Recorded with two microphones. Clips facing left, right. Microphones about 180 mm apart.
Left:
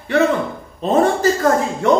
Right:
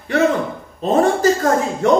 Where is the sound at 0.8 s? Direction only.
40° right (ahead or behind).